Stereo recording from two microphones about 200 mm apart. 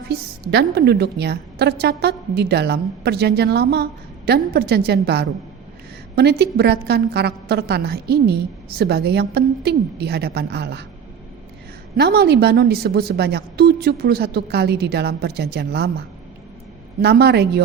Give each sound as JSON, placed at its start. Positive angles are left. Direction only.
{"t": 0.1, "sound": "a woman's voice", "side_deg": -55}
{"t": 11.9, "sound": "a woman's voice", "side_deg": -55}